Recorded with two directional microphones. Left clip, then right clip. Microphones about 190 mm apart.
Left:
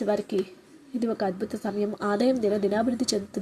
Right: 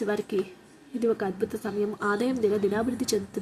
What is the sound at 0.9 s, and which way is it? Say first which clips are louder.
A woman's voice: right 1 dB; 10° left (ahead or behind).